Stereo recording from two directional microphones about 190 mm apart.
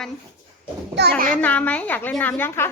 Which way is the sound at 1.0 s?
65° right (ahead or behind).